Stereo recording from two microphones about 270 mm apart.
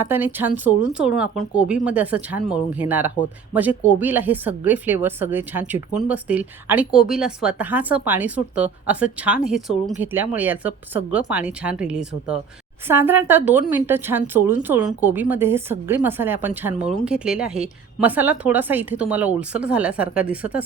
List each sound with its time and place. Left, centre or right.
0.0 s a woman's voice: centre
3.2 s speech: centre
3.5 s a woman's voice: centre